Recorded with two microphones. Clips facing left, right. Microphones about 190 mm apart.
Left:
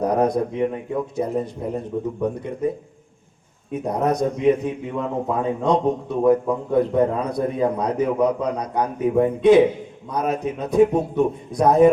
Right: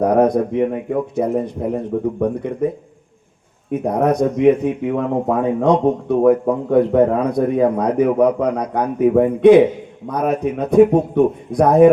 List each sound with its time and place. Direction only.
0.0 s a man's voice: 60° right (ahead or behind)
3.8 s a man's voice: 60° right (ahead or behind)